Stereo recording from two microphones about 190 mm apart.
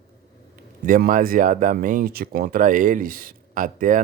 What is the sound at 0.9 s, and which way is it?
Speech, 45° right (ahead or behind).